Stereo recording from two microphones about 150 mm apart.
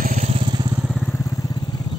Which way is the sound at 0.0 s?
50° right (ahead or behind).